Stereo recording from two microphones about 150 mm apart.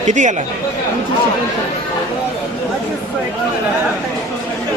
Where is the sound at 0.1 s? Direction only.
55° right (ahead or behind).